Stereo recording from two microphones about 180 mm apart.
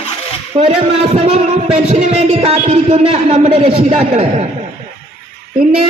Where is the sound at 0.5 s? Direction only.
35° right (ahead or behind).